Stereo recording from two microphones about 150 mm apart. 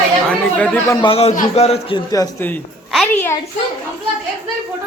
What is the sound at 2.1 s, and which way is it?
Speech, 25° left (ahead or behind).